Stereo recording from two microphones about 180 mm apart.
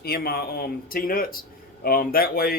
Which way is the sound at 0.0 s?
60° left (ahead or behind).